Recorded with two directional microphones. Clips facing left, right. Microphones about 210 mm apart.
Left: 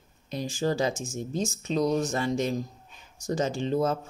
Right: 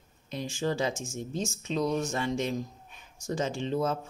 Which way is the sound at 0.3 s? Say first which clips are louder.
Left 3 dB; 35° left (ahead or behind).